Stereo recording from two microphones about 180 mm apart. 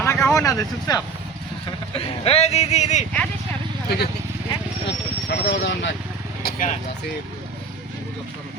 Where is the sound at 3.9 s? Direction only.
65° left (ahead or behind).